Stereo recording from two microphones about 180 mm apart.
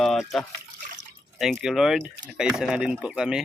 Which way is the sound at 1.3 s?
Centre (ahead or behind).